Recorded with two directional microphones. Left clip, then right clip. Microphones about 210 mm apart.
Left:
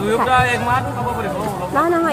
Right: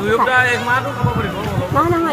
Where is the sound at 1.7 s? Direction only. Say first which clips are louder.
Right 1 dB; 35° right (ahead or behind).